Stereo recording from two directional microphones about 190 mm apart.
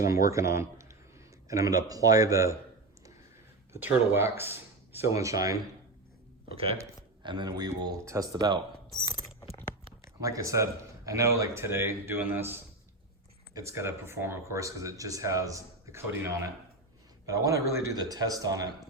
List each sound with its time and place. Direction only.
0.3 s speech: 15° right (ahead or behind)
3.7 s speech: 10° right (ahead or behind)
6.7 s speech: 25° right (ahead or behind)
9.0 s a sound: 20° left (ahead or behind)
10.2 s speech: 15° right (ahead or behind)
17.2 s speech: 15° right (ahead or behind)